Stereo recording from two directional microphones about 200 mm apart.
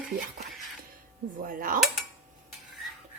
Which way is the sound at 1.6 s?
45° right (ahead or behind).